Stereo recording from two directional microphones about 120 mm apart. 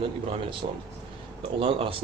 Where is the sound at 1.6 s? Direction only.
50° right (ahead or behind).